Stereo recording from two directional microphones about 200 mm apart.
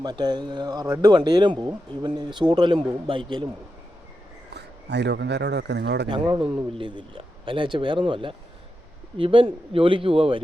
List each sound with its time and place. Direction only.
0.0 s speech: 20° right (ahead or behind)
4.5 s a man's voice: 60° right (ahead or behind)
6.1 s speech: 25° right (ahead or behind)